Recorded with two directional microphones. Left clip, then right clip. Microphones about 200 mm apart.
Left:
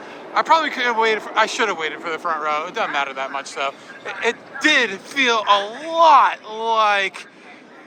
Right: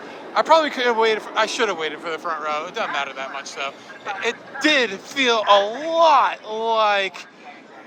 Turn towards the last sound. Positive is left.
turn(degrees=-20)  # may be behind; listen again after turning